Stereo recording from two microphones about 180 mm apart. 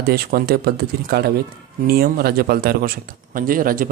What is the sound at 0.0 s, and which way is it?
A man's voice, 60° right (ahead or behind).